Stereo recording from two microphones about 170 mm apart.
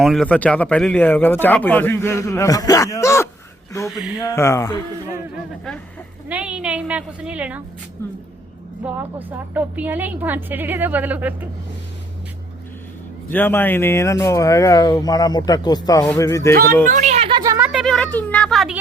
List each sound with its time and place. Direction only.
0.0 s speech: centre (ahead or behind); by 3.2 s 15° left (ahead or behind)
3.8 s a woman's voice: centre (ahead or behind)
4.2 s speech: 15° left (ahead or behind)
6.2 s a woman's voice: 5° right (ahead or behind)
8.8 s a woman's voice: 10° right (ahead or behind)
13.3 s speech: 10° left (ahead or behind)
16.9 s speech: 45° right (ahead or behind)
17.2 s speech: 25° right (ahead or behind)
17.7 s a woman's voice: centre (ahead or behind)